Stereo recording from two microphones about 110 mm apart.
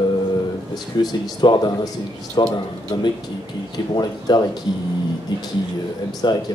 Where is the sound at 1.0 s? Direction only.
40° left (ahead or behind).